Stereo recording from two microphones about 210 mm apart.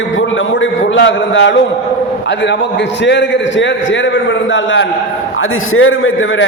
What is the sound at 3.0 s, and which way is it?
A man's voice, 55° left (ahead or behind).